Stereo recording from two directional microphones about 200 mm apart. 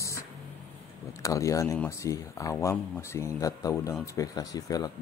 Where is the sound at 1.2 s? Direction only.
15° left (ahead or behind).